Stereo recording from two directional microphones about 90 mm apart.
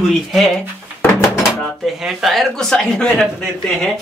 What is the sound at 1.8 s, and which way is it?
Speech, 5° right (ahead or behind).